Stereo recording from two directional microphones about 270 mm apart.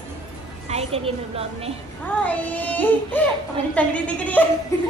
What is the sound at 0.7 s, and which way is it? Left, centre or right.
A woman's voice, right.